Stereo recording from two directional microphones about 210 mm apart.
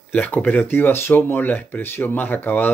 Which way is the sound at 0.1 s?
5° left (ahead or behind).